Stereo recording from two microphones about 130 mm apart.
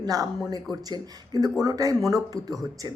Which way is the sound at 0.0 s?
30° right (ahead or behind).